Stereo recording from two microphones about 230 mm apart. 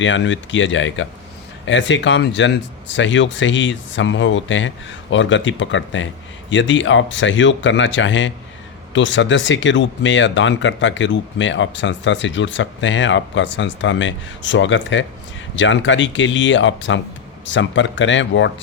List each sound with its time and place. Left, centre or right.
0.0 s speech: left